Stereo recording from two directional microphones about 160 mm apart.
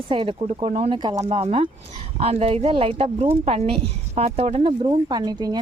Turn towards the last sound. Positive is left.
turn(degrees=-25)  # may be behind; listen again after turning